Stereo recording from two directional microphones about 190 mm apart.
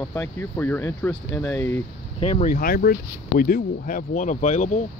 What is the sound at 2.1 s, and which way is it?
Speech, 30° left (ahead or behind).